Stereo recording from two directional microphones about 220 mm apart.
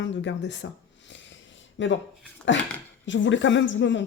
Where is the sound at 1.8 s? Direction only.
55° left (ahead or behind).